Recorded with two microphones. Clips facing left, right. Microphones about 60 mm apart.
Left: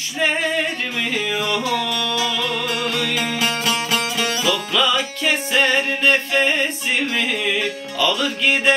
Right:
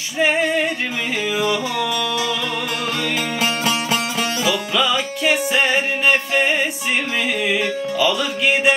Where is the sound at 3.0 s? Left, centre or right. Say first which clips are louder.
Even; right.